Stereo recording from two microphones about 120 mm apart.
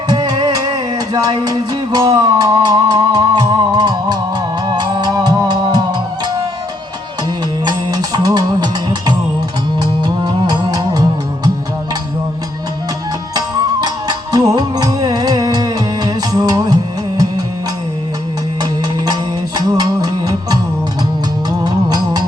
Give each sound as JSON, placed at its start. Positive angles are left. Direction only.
{"t": 0.1, "sound": "music", "side_deg": -35}
{"t": 7.6, "sound": "music", "side_deg": -35}
{"t": 13.8, "sound": "music", "side_deg": -35}
{"t": 18.6, "sound": "music", "side_deg": -35}
{"t": 21.6, "sound": "music", "side_deg": -35}